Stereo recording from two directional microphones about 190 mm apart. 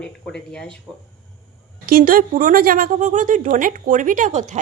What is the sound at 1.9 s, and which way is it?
A woman's voice, 50° right (ahead or behind).